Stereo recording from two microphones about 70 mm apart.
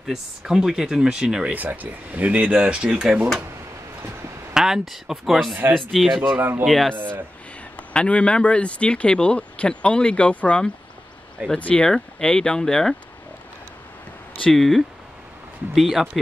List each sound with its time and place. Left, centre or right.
0.0 s speech: centre
1.5 s speech: right
4.6 s speech: centre
7.0 s speech: right
7.7 s speech: centre
11.8 s speech: centre
14.5 s speech: centre